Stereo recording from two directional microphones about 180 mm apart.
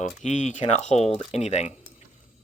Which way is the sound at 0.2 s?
40° left (ahead or behind).